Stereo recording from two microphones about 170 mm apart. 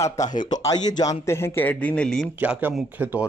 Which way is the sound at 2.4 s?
10° right (ahead or behind).